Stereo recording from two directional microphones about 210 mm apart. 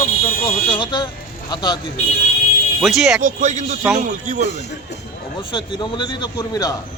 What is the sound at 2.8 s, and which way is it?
Speech, centre (ahead or behind).